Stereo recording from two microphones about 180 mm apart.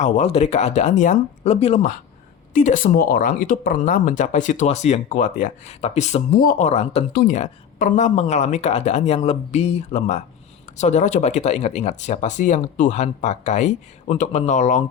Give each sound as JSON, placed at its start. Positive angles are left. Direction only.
{"t": 0.0, "sound": "speech", "side_deg": 35}
{"t": 7.1, "sound": "speech", "side_deg": 55}
{"t": 7.3, "sound": "speech", "side_deg": 40}